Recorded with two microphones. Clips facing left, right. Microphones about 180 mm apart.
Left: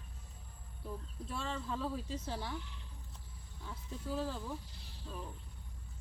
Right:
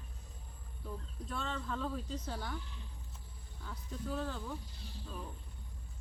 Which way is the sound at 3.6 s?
5° left (ahead or behind).